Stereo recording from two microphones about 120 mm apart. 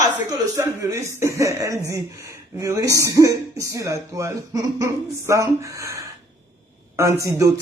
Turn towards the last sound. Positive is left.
turn(degrees=-25)  # may be behind; listen again after turning